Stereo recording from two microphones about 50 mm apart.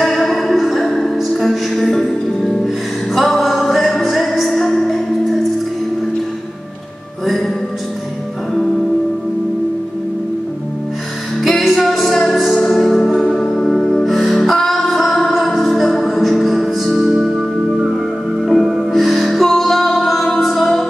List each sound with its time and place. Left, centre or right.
0.0 s music: centre
7.2 s music: centre
11.4 s music: centre